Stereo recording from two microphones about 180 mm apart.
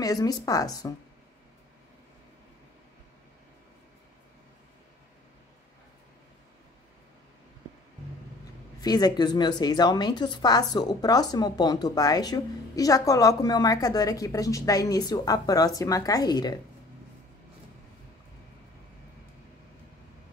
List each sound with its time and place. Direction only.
0.0 s a woman's voice: 20° left (ahead or behind)
8.8 s a woman's voice: 20° left (ahead or behind)